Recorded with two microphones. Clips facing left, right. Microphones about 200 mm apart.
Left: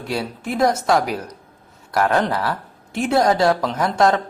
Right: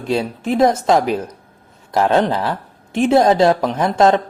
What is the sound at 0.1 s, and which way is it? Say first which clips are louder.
Speech: right 6 dB; 20° right (ahead or behind).